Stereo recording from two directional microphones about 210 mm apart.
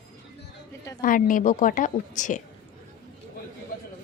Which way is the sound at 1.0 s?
40° left (ahead or behind).